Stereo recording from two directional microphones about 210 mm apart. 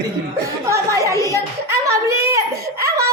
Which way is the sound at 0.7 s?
15° right (ahead or behind).